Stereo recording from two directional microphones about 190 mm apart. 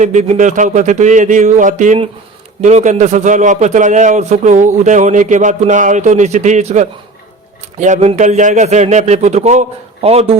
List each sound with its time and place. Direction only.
0.0 s a man's voice: 40° right (ahead or behind)